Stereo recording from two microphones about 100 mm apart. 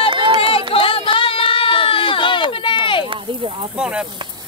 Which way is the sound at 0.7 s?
65° left (ahead or behind).